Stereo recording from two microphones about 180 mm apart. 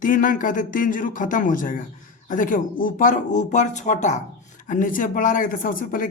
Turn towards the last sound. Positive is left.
turn(degrees=50)  # may be behind; listen again after turning